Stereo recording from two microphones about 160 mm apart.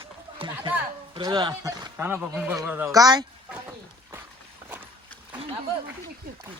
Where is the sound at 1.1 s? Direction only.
30° right (ahead or behind).